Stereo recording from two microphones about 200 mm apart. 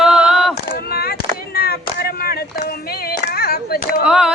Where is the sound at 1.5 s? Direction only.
50° left (ahead or behind).